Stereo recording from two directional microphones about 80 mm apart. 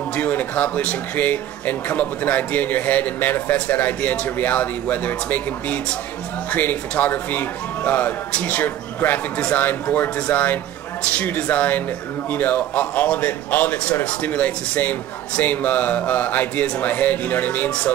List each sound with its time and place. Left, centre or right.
0.1 s a man's voice: left